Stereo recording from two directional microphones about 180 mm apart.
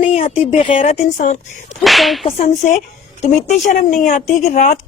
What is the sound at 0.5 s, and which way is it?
Speech, 30° left (ahead or behind).